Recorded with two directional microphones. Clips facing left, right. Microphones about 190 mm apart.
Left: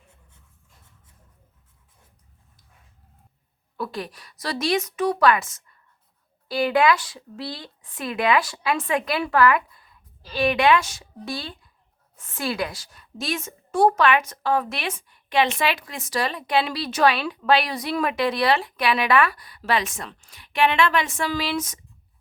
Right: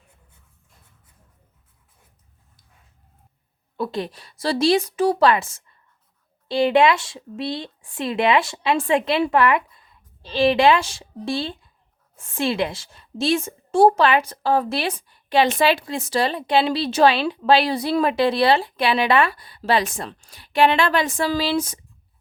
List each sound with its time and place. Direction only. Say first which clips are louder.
3.8 s a woman's voice: right 5 dB; 25° right (ahead or behind)